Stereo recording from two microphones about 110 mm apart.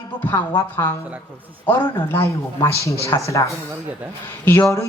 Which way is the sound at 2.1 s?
25° left (ahead or behind).